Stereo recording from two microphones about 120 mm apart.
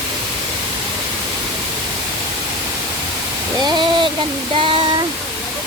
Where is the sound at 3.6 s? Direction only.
40° right (ahead or behind).